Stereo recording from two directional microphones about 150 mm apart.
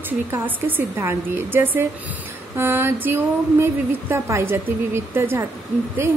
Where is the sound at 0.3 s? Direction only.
15° right (ahead or behind).